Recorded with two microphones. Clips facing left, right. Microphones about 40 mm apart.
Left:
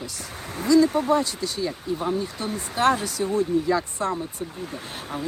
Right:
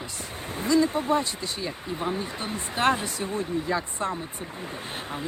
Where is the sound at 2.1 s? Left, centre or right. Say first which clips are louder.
Left 3 dB; right.